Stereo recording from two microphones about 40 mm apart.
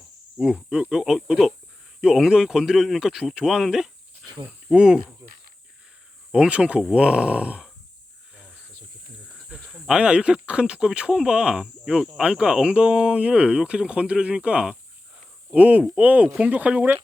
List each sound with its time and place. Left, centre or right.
0.4 s cricket: centre
0.7 s speech: centre
6.3 s speech: right
9.6 s cricket: centre
10.0 s speech: right
15.5 s speech: right